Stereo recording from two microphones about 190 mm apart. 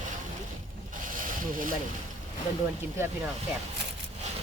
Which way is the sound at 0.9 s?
45° right (ahead or behind).